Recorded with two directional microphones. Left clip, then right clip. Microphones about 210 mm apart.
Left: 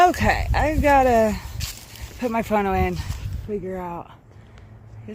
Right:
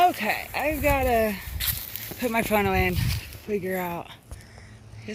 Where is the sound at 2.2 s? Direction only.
Centre (ahead or behind).